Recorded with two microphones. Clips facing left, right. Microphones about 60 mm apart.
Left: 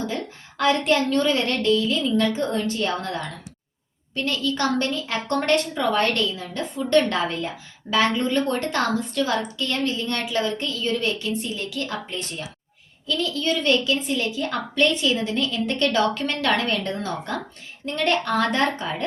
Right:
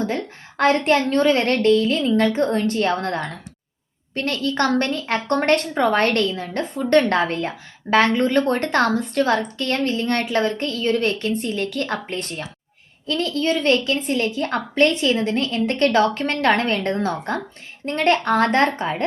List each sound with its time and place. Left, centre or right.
0.5 s a woman's voice: right